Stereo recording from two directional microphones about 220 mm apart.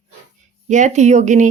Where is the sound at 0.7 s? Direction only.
35° right (ahead or behind).